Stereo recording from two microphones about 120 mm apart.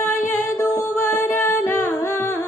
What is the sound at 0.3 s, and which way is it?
Music, 25° left (ahead or behind).